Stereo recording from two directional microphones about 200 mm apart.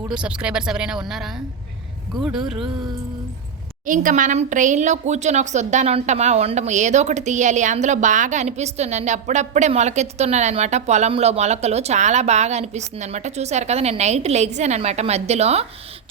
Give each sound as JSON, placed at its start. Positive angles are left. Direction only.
{"t": 0.1, "sound": "speech", "side_deg": -5}
{"t": 3.8, "sound": "speech", "side_deg": -40}